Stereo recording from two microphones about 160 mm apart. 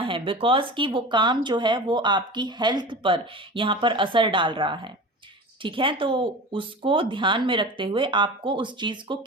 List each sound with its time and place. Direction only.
0.0 s speech: 30° right (ahead or behind)